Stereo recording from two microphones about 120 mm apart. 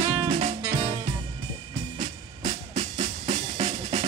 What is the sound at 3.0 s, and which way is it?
Music, 65° right (ahead or behind).